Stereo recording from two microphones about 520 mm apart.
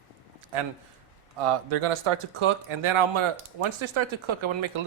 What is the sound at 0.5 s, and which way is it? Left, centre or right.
Speech, right.